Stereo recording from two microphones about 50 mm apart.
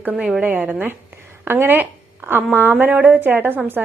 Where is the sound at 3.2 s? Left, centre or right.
Right.